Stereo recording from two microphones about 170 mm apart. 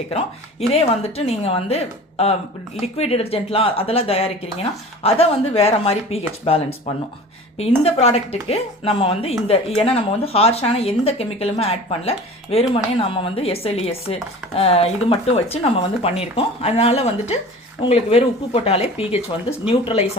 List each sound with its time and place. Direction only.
0.7 s a woman's voice: 35° left (ahead or behind)